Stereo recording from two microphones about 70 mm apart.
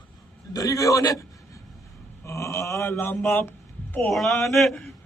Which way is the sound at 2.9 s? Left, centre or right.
Left.